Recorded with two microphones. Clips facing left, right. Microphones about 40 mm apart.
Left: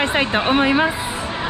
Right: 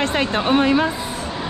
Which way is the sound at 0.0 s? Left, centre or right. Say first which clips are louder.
Left 1 dB; centre.